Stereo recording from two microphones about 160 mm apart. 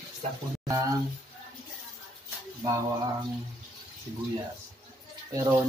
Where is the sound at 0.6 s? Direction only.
20° right (ahead or behind).